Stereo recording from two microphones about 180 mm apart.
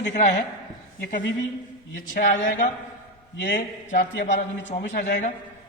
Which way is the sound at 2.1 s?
50° left (ahead or behind).